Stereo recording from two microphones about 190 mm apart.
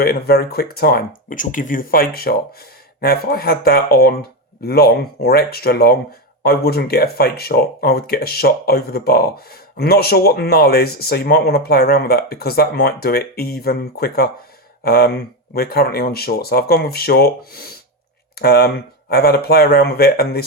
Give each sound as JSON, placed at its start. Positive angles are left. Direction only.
{"t": 0.0, "sound": "speech", "side_deg": 55}